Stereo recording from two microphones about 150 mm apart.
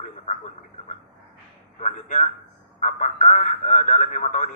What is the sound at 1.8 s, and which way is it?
Speech, 55° left (ahead or behind).